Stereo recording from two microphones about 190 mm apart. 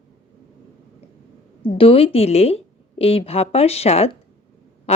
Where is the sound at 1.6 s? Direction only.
30° left (ahead or behind).